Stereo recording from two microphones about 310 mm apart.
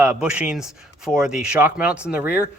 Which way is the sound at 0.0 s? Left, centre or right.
Centre.